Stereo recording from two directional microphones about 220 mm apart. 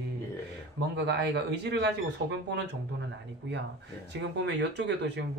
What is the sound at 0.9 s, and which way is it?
Speech, 50° right (ahead or behind).